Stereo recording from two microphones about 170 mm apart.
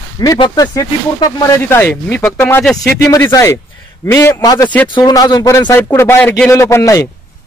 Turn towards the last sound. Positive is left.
turn(degrees=15)  # may be behind; listen again after turning